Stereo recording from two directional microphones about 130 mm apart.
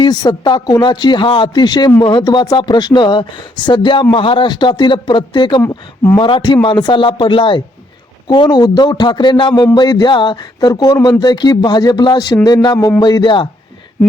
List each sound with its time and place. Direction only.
0.0 s speech: 35° left (ahead or behind)
5.6 s speech: 15° left (ahead or behind)
6.1 s speech: 35° left (ahead or behind)